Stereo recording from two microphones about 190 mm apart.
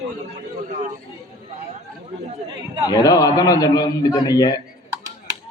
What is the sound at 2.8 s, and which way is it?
A man's voice, 20° left (ahead or behind).